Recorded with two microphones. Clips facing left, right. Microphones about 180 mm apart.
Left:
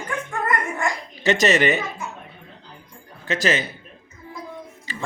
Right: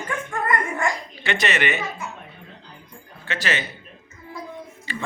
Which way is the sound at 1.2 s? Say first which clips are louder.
Left 6 dB; 40° left (ahead or behind).